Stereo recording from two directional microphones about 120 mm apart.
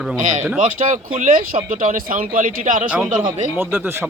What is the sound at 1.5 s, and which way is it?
Speech, 60° right (ahead or behind).